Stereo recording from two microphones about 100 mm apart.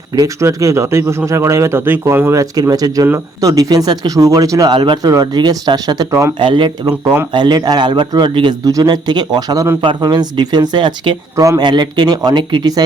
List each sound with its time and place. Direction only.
0.1 s a man's voice: 35° right (ahead or behind)
4.7 s speech: 50° right (ahead or behind)
6.4 s speech: 55° right (ahead or behind)
7.3 s speech: 45° right (ahead or behind)
11.3 s speech: 35° right (ahead or behind)
11.6 s speech: 45° right (ahead or behind)